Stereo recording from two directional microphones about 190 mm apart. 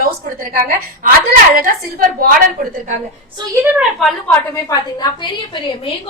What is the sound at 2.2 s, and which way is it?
Speech, 45° right (ahead or behind).